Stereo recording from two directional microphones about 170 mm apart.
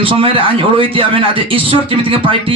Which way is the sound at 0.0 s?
30° right (ahead or behind).